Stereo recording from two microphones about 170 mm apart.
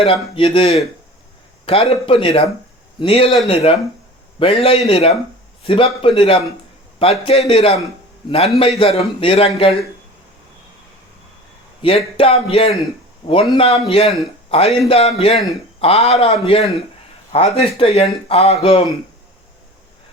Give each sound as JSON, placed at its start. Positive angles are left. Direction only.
{"t": 0.0, "sound": "a man's voice", "side_deg": 35}
{"t": 11.8, "sound": "a man's voice", "side_deg": 30}